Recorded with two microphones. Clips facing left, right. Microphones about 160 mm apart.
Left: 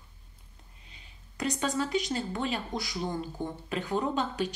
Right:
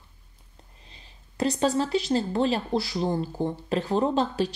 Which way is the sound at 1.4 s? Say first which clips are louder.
Right 6 dB; 35° right (ahead or behind).